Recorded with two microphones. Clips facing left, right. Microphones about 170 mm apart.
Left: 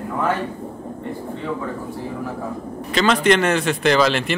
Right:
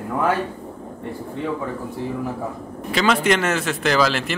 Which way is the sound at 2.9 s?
10° right (ahead or behind).